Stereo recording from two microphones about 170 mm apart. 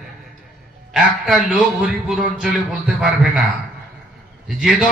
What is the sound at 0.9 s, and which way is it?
A man's voice, 5° right (ahead or behind).